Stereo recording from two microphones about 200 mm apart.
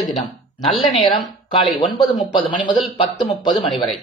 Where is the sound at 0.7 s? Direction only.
Centre (ahead or behind).